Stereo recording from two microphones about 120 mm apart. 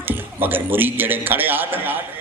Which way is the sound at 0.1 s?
15° right (ahead or behind).